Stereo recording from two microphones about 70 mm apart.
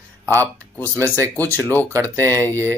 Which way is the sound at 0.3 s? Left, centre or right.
Left.